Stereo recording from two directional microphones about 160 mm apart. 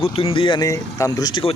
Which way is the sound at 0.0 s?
35° left (ahead or behind).